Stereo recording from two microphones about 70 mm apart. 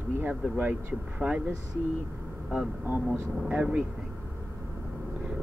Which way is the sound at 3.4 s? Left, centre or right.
Right.